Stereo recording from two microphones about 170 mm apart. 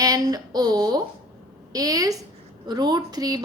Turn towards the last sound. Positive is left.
turn(degrees=-25)  # may be behind; listen again after turning